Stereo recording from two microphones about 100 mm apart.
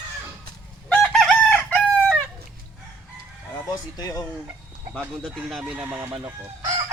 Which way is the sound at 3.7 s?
40° left (ahead or behind).